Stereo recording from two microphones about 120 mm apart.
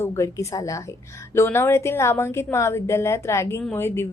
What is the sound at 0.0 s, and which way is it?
Speech, 25° left (ahead or behind).